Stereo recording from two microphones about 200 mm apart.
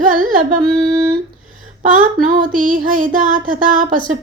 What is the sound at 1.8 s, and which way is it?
Female singing, 40° right (ahead or behind).